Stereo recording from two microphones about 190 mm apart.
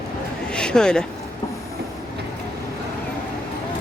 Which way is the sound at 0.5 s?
5° left (ahead or behind).